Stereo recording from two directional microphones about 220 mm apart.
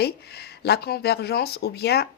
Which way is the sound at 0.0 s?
45° left (ahead or behind).